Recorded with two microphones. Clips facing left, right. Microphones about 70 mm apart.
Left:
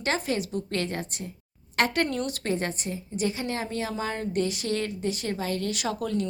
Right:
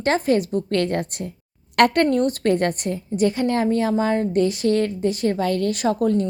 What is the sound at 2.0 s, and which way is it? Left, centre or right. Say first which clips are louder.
A woman's voice: right 10 dB; right.